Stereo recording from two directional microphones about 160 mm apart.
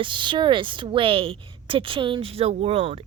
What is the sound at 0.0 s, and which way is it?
A woman's voice, 30° right (ahead or behind).